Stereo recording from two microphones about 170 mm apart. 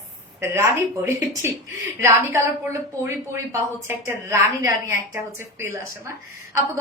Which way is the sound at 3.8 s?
15° right (ahead or behind).